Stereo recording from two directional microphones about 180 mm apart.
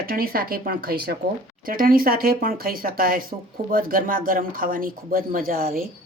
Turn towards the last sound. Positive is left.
turn(degrees=-50)  # may be behind; listen again after turning